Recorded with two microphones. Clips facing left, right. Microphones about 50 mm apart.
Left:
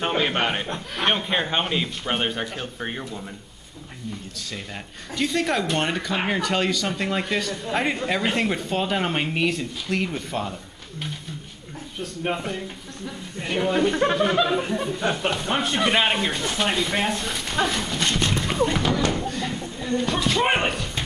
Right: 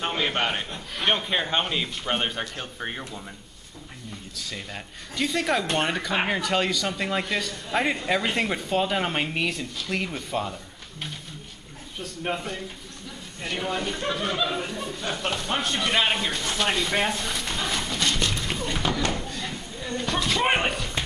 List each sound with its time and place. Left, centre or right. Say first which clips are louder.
0.0 s a man's voice: left 3 dB; centre
5.1 s speech: left 2 dB; centre
13.9 s speech: left 8 dB; left
14.2 s speech: left 4 dB; centre
14.5 s speech: left 6 dB; centre
17.6 s dog: left 2 dB; centre
18.8 s speech: left 4 dB; centre
19.3 s a sound: left 5 dB; centre